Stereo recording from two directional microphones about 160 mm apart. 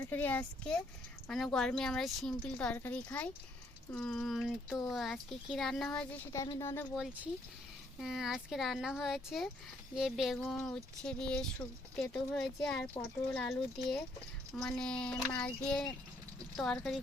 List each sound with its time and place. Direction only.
0.1 s speech: 10° left (ahead or behind)
6.3 s speech: 20° left (ahead or behind)
6.9 s speech: 5° right (ahead or behind)